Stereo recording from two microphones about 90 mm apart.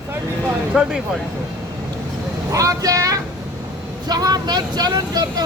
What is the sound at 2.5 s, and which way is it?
Speech, 40° right (ahead or behind).